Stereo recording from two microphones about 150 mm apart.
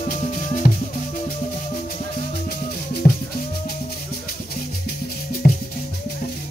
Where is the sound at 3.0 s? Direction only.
65° left (ahead or behind).